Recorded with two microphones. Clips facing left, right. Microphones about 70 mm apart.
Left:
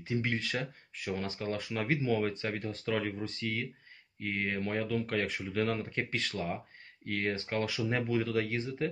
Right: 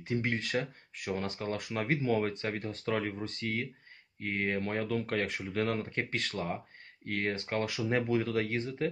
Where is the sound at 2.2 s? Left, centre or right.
Right.